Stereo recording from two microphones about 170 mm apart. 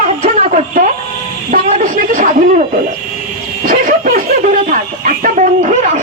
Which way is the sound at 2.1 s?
50° right (ahead or behind).